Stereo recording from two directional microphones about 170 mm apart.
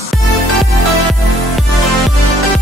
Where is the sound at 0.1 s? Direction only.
Centre (ahead or behind).